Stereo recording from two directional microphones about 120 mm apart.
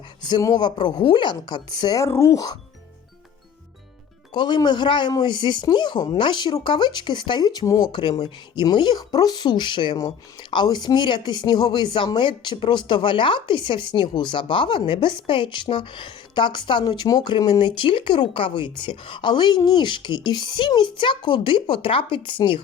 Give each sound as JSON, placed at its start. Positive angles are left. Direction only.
{"t": 0.2, "sound": "speech", "side_deg": 35}
{"t": 4.4, "sound": "speech", "side_deg": 40}